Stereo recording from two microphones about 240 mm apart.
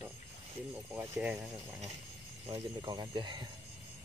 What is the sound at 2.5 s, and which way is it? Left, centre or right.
Speech, centre.